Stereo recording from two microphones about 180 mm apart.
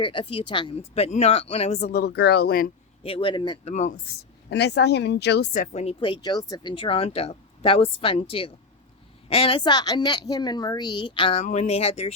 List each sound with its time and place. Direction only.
0.0 s speech: 30° left (ahead or behind)
1.9 s speech: 60° left (ahead or behind)
3.0 s a woman's voice: 30° left (ahead or behind)
3.7 s speech: 40° left (ahead or behind)
4.4 s speech: 70° left (ahead or behind)
5.5 s a woman's voice: 35° left (ahead or behind)